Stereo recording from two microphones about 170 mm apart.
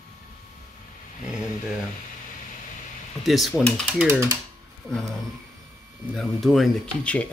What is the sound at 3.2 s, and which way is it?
Speech, centre (ahead or behind).